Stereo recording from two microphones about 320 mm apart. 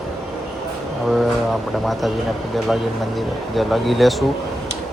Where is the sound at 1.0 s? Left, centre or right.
Centre.